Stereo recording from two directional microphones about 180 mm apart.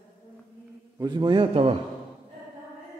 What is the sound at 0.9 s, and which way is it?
Speech, 25° right (ahead or behind).